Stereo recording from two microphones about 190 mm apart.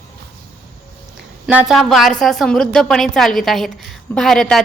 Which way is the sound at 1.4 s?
5° right (ahead or behind).